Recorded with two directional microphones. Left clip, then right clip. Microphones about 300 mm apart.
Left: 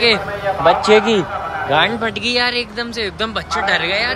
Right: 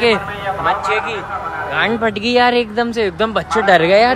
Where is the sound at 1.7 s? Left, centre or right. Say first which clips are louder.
Left 1 dB; centre.